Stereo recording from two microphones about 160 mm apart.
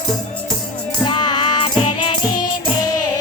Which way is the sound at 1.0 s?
30° left (ahead or behind).